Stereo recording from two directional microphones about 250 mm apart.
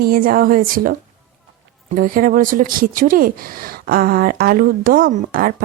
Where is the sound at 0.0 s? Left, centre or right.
Right.